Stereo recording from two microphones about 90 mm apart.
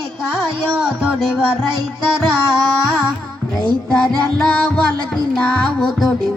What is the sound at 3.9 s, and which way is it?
Music, 10° left (ahead or behind).